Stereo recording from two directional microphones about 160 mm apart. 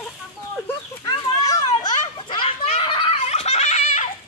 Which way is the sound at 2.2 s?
30° left (ahead or behind).